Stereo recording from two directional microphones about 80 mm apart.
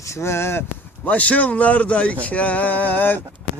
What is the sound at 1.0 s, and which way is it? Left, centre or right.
A man's voice, centre.